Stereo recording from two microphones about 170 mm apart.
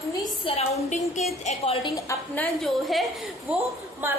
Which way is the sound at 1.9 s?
15° left (ahead or behind).